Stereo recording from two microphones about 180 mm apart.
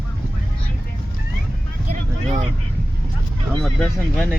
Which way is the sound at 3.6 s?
5° left (ahead or behind).